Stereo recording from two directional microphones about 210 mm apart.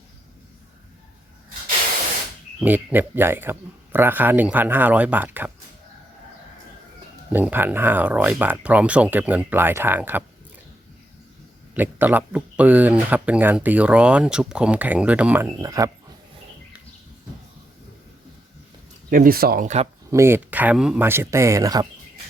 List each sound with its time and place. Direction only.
2.6 s speech: 10° right (ahead or behind)
7.3 s speech: 10° right (ahead or behind)
11.7 s speech: 10° right (ahead or behind)
19.1 s speech: 45° right (ahead or behind)
20.1 s speech: 15° right (ahead or behind)